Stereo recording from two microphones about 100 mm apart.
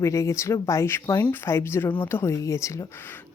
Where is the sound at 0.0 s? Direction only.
30° left (ahead or behind).